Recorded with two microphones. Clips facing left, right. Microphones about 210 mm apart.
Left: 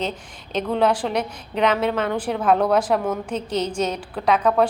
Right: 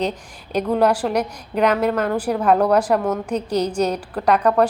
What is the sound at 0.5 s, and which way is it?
A woman's voice, 10° right (ahead or behind).